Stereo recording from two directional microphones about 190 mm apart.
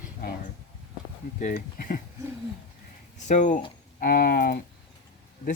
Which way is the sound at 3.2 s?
40° left (ahead or behind).